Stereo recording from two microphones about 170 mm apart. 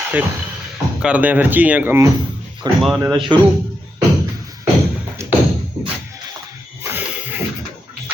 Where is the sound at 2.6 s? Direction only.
25° right (ahead or behind).